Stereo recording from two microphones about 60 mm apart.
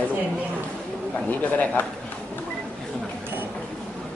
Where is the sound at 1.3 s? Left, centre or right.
Left.